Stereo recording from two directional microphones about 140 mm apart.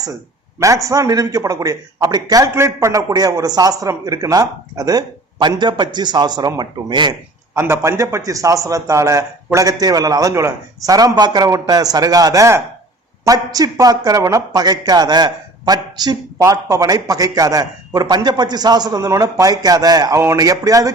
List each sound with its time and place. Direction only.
0.6 s a man's voice: 25° right (ahead or behind)
7.5 s a man's voice: 15° right (ahead or behind)